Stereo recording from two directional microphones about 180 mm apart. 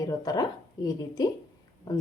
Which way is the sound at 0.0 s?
20° left (ahead or behind).